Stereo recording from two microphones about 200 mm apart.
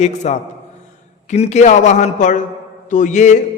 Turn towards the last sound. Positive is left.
turn(degrees=35)  # may be behind; listen again after turning